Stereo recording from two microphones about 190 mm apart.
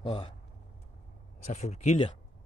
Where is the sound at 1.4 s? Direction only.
35° left (ahead or behind).